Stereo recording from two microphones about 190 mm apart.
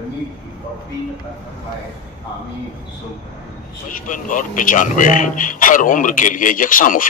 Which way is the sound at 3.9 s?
45° left (ahead or behind).